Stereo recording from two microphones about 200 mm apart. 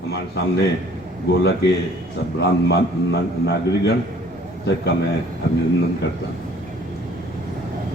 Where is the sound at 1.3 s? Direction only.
55° left (ahead or behind).